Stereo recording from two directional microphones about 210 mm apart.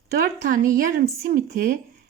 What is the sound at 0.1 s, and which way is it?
A woman's voice, 45° right (ahead or behind).